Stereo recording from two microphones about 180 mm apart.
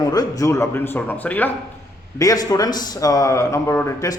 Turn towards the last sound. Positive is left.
turn(degrees=15)  # may be behind; listen again after turning